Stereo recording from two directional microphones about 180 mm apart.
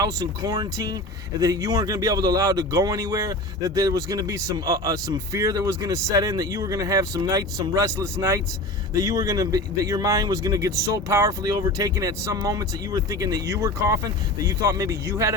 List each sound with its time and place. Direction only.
0.0 s speech: 20° right (ahead or behind)